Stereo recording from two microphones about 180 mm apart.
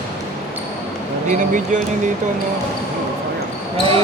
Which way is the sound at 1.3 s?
45° right (ahead or behind).